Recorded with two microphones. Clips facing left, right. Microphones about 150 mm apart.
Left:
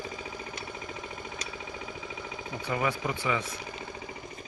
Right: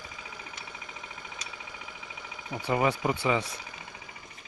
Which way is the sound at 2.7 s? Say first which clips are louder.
Right 4 dB; 30° right (ahead or behind).